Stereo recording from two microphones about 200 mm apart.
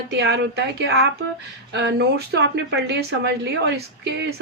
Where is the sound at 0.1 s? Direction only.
60° right (ahead or behind).